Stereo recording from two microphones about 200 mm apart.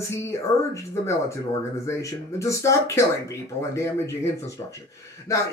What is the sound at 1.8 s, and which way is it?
Speech, 15° left (ahead or behind).